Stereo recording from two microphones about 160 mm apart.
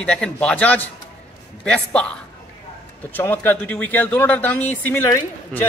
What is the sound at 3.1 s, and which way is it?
Speech, 10° left (ahead or behind).